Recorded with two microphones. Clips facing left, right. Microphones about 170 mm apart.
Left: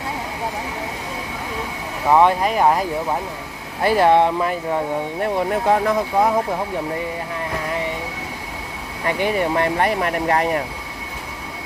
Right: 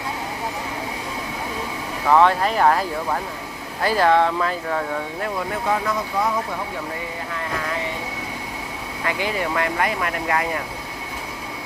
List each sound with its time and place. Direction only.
2.0 s speech: 15° left (ahead or behind)
5.4 s speech: 40° left (ahead or behind)
9.4 s speech: 30° left (ahead or behind)